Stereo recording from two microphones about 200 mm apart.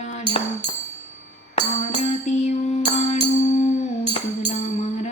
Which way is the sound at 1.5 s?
35° left (ahead or behind).